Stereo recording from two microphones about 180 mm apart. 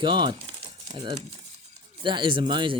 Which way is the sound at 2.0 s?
25° right (ahead or behind).